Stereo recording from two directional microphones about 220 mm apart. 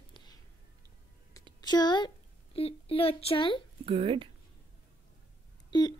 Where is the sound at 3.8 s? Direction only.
25° right (ahead or behind).